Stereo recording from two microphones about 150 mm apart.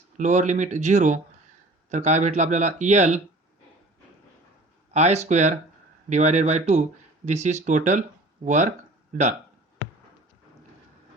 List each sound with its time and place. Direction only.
0.2 s speech: 55° right (ahead or behind)
4.9 s speech: 45° right (ahead or behind)